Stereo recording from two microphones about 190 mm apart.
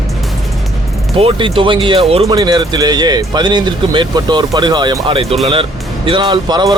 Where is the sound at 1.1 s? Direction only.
30° right (ahead or behind).